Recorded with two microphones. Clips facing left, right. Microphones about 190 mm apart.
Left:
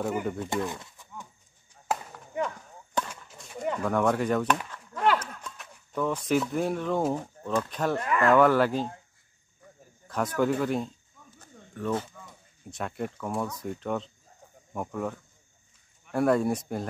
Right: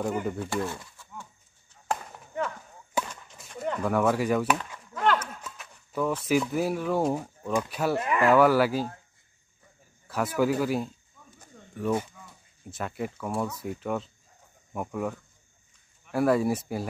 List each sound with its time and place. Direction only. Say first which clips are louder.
0.0 s speech: even; centre (ahead or behind)
0.7 s chicken: even; 15° left (ahead or behind)
1.7 s chop: even; 15° left (ahead or behind)
3.0 s a sound: right 1 dB; 10° right (ahead or behind)
3.3 s pigeon: left 2 dB; 5° right (ahead or behind)
3.8 s speech: right 1 dB; 5° right (ahead or behind)
5.2 s a sound: right 1 dB; 5° right (ahead or behind)
6.2 s speech: right 1 dB; 5° right (ahead or behind)
10.0 s a sound: right 1 dB; 5° right (ahead or behind)
12.7 s speech: even; 5° right (ahead or behind)